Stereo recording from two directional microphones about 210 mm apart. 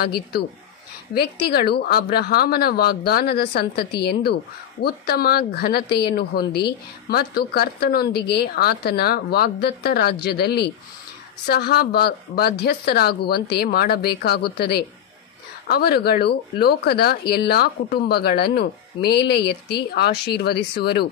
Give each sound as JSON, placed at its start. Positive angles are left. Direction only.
{"t": 0.0, "sound": "a woman's voice", "side_deg": 50}